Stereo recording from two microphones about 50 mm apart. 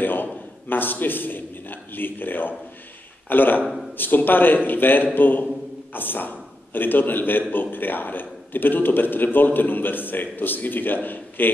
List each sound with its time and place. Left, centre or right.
0.0 s a man's voice: left